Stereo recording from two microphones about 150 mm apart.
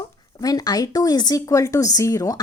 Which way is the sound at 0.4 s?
25° left (ahead or behind).